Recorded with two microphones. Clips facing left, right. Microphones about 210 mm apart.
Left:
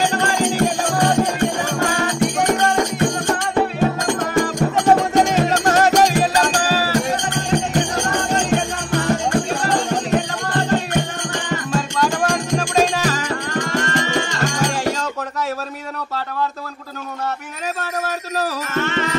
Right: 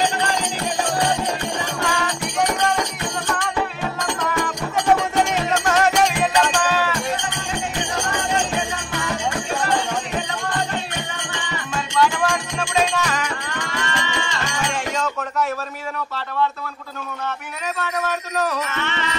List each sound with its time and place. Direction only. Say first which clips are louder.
0.2 s music: left 6 dB; 50° left (ahead or behind)
18.4 s music: left 3 dB; 40° left (ahead or behind)